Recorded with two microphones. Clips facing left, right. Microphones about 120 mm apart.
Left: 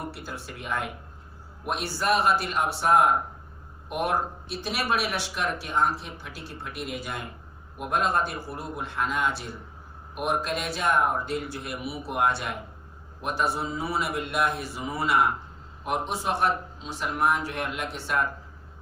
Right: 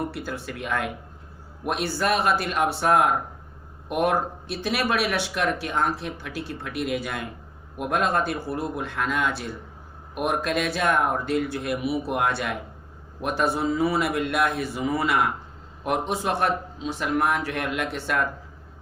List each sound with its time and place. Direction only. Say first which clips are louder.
0.1 s speech: right 6 dB; 65° right (ahead or behind)
1.6 s speech: right 2 dB; 60° right (ahead or behind); by 3.1 s 80° right
4.0 s speech: right 3 dB; 60° right (ahead or behind); by 7.3 s 90° right
7.8 s speech: right 2 dB; 80° right
10.2 s speech: right 3 dB; 65° right (ahead or behind)
13.2 s speech: right 4 dB; 55° right (ahead or behind)
15.9 s speech: right 3 dB; 60° right (ahead or behind)